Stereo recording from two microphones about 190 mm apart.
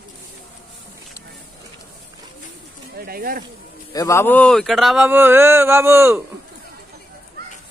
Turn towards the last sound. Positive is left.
turn(degrees=-10)  # may be behind; listen again after turning